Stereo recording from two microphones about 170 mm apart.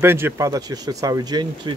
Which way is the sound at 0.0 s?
15° right (ahead or behind).